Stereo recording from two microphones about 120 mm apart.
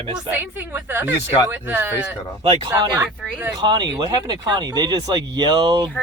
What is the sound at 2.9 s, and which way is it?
Speech, 15° right (ahead or behind).